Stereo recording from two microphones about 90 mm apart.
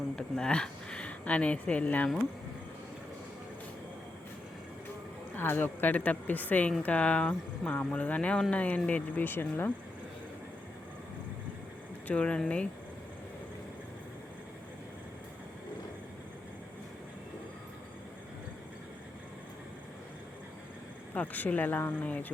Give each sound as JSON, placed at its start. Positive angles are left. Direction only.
{"t": 0.2, "sound": "speech", "side_deg": 10}
{"t": 5.3, "sound": "speech", "side_deg": 25}
{"t": 12.0, "sound": "speech", "side_deg": 15}
{"t": 21.1, "sound": "speech", "side_deg": 20}